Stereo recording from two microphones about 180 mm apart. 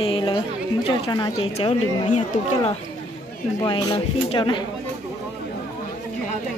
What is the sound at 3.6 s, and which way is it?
Speech, 20° left (ahead or behind).